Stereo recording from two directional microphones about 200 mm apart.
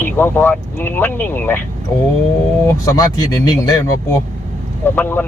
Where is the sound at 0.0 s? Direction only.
10° left (ahead or behind).